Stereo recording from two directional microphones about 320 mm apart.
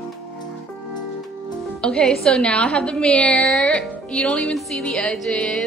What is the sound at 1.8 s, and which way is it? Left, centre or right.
A woman's voice, centre.